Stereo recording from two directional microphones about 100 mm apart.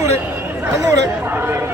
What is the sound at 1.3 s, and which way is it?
Speech, 20° right (ahead or behind).